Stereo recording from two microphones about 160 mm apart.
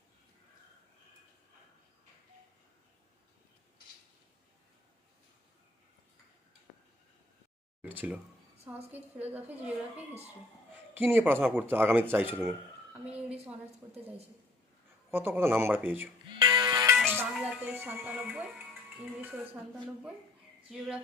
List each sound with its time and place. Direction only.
7.8 s speech: 10° right (ahead or behind)
10.9 s speech: 10° right (ahead or behind)
15.1 s speech: 15° right (ahead or behind)
16.4 s music: 30° right (ahead or behind)
17.2 s speech: 5° right (ahead or behind)
20.7 s a sound: 5° right (ahead or behind)